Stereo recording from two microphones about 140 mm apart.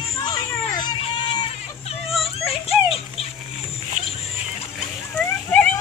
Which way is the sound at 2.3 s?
45° left (ahead or behind).